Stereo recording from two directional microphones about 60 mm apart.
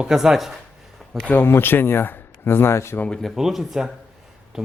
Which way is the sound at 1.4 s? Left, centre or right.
Left.